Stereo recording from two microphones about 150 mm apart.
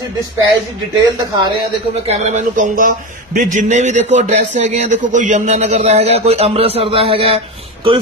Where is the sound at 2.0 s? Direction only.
45° right (ahead or behind).